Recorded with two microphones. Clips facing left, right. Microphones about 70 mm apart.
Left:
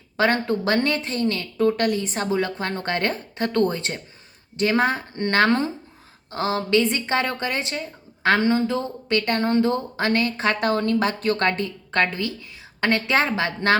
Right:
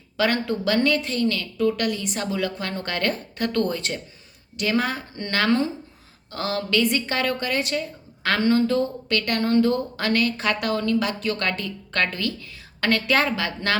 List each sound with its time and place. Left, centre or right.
0.2 s a woman's voice: left